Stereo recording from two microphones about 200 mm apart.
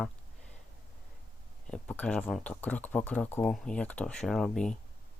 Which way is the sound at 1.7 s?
5° left (ahead or behind).